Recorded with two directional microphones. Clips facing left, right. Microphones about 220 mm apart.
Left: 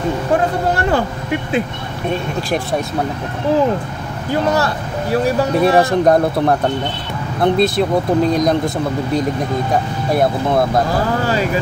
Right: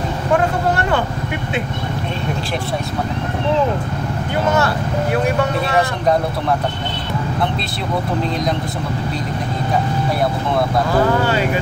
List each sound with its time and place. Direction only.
5.1 s speech: 35° left (ahead or behind)